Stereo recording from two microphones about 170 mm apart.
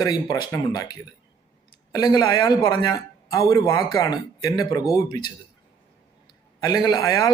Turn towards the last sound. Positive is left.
turn(degrees=20)  # may be behind; listen again after turning